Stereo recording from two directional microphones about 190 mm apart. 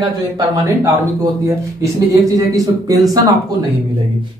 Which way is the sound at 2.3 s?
20° right (ahead or behind).